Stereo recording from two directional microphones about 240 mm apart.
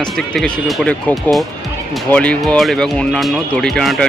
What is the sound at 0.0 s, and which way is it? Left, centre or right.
Speech, centre.